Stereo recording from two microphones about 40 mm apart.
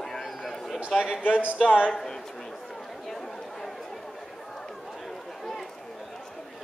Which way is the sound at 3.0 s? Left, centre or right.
Centre.